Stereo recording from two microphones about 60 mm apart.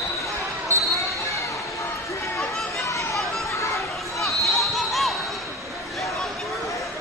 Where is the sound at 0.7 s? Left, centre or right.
Right.